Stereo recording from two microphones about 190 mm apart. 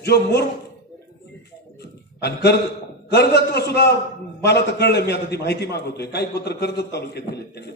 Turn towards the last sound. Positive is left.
turn(degrees=60)  # may be behind; listen again after turning